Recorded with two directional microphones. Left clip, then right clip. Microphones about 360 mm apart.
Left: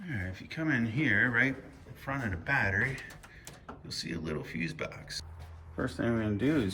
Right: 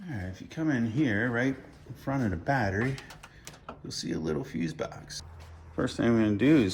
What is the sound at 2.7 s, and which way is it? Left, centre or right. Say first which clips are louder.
A man's voice: left 1 dB; centre.